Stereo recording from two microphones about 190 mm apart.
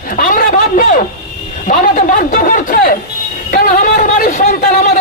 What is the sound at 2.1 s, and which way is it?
Chatter, 45° left (ahead or behind).